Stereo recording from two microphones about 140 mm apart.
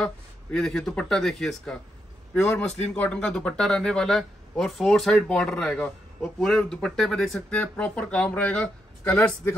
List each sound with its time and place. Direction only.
0.0 s speech: 5° left (ahead or behind)